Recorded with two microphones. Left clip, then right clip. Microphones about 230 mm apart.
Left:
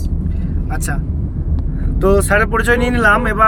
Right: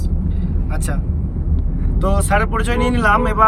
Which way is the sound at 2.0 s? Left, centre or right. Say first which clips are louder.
Left 5 dB; centre.